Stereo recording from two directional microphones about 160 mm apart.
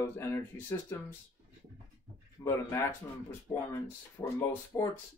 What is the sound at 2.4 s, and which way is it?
Speech, 15° left (ahead or behind).